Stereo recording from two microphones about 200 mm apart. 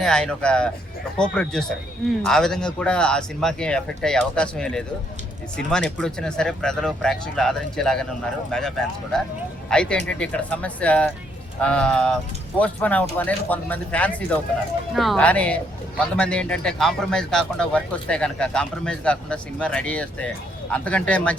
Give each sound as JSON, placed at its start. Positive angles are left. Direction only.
{"t": 0.0, "sound": "speech", "side_deg": 5}